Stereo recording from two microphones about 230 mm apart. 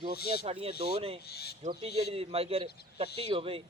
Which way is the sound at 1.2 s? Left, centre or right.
Left.